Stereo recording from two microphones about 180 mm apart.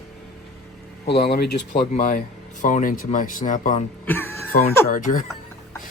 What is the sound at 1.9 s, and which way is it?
Speech, 45° left (ahead or behind).